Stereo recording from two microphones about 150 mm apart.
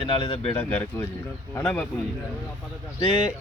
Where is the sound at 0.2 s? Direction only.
40° left (ahead or behind).